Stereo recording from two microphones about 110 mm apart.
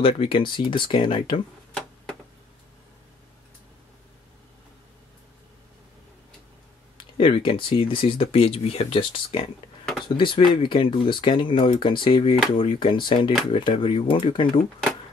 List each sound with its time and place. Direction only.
0.0 s speech: 55° left (ahead or behind)
7.0 s speech: 55° left (ahead or behind)